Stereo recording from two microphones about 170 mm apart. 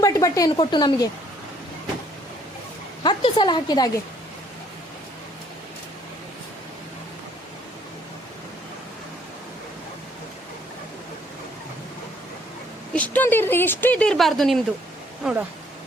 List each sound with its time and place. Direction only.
0.0 s a woman's voice: 20° left (ahead or behind)
3.0 s a woman's voice: 25° left (ahead or behind)
12.9 s speech: 10° left (ahead or behind)